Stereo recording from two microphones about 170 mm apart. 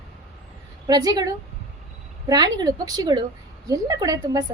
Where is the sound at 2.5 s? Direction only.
20° right (ahead or behind).